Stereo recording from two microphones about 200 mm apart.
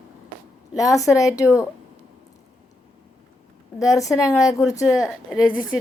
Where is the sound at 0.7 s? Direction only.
15° left (ahead or behind).